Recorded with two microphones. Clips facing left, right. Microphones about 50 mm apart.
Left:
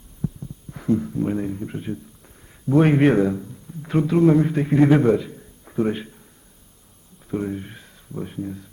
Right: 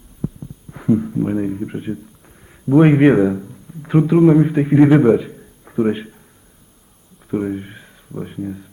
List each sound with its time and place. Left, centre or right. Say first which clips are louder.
0.2 s a sound: right 3 dB; centre
2.6 s a man's voice: right 5 dB; centre
7.3 s speech: right 5 dB; centre